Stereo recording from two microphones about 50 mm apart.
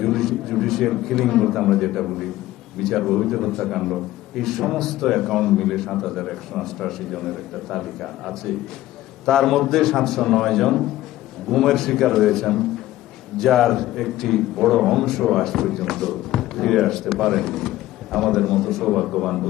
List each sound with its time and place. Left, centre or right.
0.0 s a man's voice: centre